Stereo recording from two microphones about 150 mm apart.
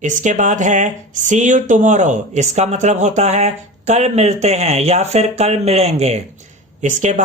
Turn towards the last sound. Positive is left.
turn(degrees=-55)  # may be behind; listen again after turning